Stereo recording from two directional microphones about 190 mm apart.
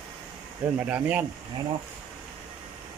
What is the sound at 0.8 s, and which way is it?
Speech, 10° right (ahead or behind).